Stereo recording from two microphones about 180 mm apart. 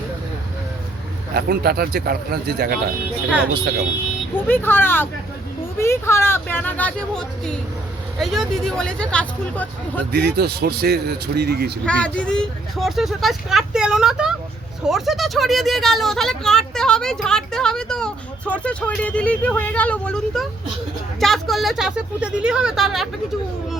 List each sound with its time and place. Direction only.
1.3 s a man's voice: 60° right (ahead or behind)
4.4 s a woman's voice: 10° left (ahead or behind)
10.1 s a man's voice: 60° right (ahead or behind)
11.9 s a woman's voice: 5° left (ahead or behind)